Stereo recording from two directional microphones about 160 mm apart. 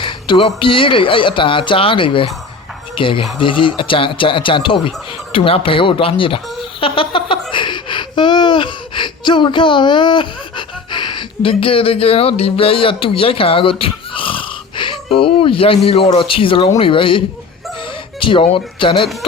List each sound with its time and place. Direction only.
0.0 s speech: 30° left (ahead or behind)
5.3 s a sound: 35° left (ahead or behind)
10.9 s speech: 30° left (ahead or behind)